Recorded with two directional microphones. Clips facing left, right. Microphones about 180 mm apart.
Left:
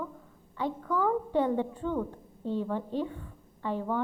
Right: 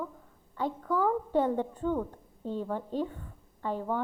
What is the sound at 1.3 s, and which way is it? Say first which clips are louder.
Speech: even; 45° right (ahead or behind).